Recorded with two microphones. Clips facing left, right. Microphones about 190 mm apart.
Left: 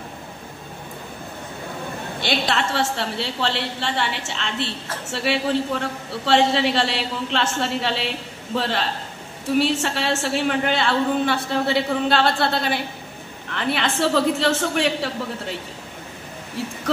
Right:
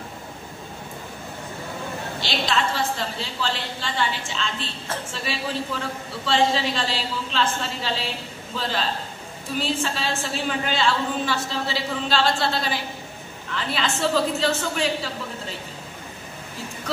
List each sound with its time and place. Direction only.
2.1 s a woman's voice: 55° left (ahead or behind)